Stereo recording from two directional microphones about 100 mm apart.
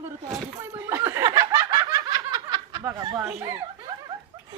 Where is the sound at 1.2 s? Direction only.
40° right (ahead or behind).